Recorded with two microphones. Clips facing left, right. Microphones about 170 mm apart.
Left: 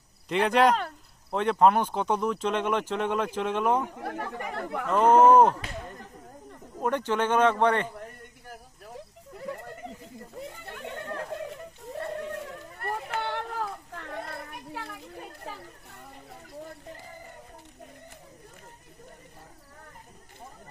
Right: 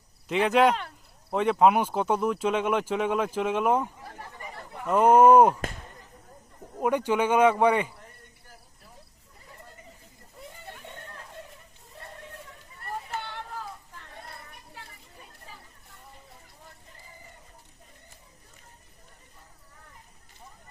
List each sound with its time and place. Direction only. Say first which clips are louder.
0.3 s speech: even; centre (ahead or behind)
3.8 s speech: left 9 dB; 65° left (ahead or behind)
4.9 s speech: right 1 dB; 10° right (ahead or behind)
6.8 s speech: right 2 dB; 10° right (ahead or behind)
9.3 s goat: left 14 dB; 75° left (ahead or behind)
10.7 s a sound: left 9 dB; 70° left (ahead or behind)